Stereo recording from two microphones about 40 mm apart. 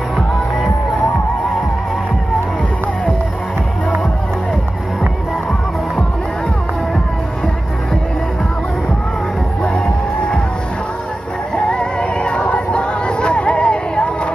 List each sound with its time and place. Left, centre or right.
11.5 s music: left